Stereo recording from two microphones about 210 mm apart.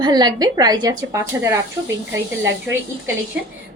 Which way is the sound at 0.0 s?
20° right (ahead or behind).